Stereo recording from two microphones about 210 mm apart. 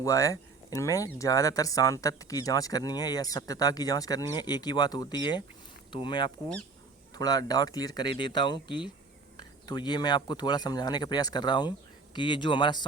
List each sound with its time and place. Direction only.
0.0 s speech: 15° left (ahead or behind)